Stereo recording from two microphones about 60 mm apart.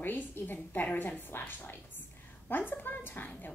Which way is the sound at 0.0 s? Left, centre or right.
Left.